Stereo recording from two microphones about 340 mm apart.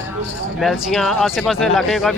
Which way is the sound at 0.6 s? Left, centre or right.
Centre.